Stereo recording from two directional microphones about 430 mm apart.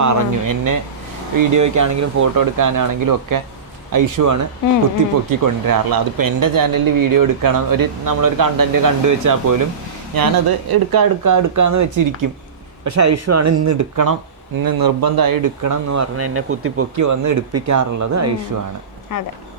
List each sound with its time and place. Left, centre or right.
0.0 s speech: right
10.2 s speech: right
19.1 s speech: left